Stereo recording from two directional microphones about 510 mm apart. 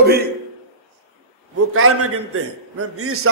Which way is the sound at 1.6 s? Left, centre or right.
Right.